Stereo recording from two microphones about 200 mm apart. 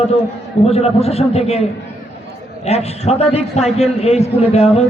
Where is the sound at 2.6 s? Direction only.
30° left (ahead or behind).